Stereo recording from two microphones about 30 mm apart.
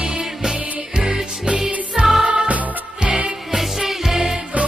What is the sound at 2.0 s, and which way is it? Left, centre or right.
Music, right.